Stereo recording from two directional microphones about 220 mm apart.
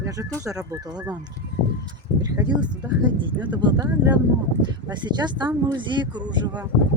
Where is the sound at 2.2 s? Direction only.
15° right (ahead or behind).